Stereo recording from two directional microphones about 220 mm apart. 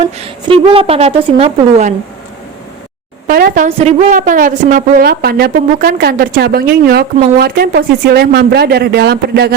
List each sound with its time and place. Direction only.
0.2 s a woman's voice: 25° right (ahead or behind)
3.2 s a woman's voice: 40° right (ahead or behind)
3.8 s a woman's voice: 30° right (ahead or behind); by 9.5 s 45° right (ahead or behind)